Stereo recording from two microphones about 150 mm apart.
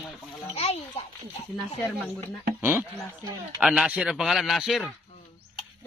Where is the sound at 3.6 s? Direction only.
5° right (ahead or behind).